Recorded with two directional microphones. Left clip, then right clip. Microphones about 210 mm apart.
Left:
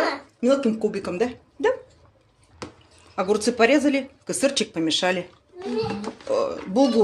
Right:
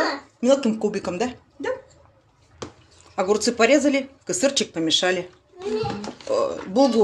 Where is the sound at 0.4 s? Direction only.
10° right (ahead or behind).